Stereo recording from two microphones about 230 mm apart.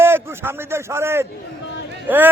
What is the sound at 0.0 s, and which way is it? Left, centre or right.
A man's voice, centre.